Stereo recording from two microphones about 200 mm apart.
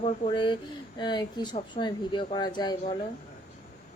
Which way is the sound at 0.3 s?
25° left (ahead or behind).